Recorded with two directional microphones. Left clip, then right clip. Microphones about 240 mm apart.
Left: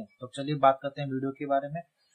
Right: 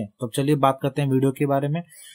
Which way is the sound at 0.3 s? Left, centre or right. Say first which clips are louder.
Right 3 dB; right.